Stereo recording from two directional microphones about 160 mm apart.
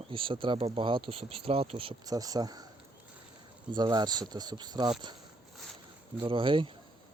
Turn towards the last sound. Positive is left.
turn(degrees=-30)  # may be behind; listen again after turning